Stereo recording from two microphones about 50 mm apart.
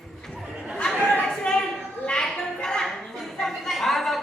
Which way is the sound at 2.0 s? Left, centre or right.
Centre.